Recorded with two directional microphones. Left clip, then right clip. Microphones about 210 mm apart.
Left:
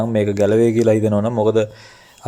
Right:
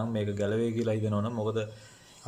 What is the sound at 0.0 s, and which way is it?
Speech, 35° left (ahead or behind).